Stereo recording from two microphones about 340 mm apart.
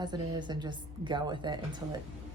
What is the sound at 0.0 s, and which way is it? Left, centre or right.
A woman's voice, centre.